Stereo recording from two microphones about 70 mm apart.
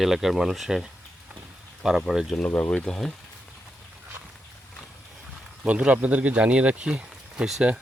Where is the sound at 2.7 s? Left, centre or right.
Centre.